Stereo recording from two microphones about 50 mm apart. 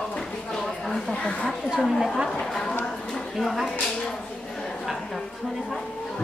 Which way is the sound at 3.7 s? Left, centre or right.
Centre.